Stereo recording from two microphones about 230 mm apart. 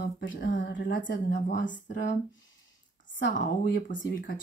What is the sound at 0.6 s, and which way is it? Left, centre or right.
Speech, left.